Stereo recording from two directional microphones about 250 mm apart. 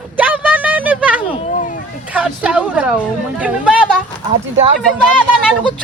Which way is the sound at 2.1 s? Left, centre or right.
Centre.